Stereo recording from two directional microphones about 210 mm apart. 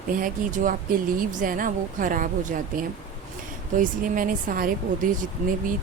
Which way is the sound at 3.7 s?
40° right (ahead or behind).